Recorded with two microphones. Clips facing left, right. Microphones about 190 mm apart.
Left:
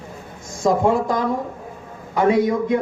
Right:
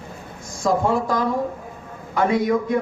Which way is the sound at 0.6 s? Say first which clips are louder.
Left 2 dB; 20° left (ahead or behind).